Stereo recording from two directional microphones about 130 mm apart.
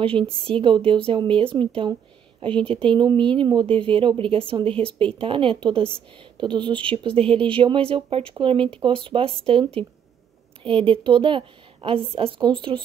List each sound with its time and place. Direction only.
0.0 s a woman's voice: 45° right (ahead or behind)
2.7 s a woman's voice: 40° right (ahead or behind)